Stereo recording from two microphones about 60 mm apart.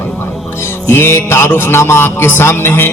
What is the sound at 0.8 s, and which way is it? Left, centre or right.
Music, left.